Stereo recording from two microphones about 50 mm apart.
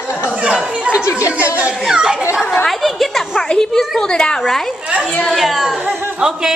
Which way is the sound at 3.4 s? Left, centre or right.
Centre.